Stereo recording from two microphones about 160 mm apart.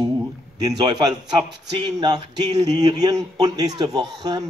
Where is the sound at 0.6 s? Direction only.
25° right (ahead or behind).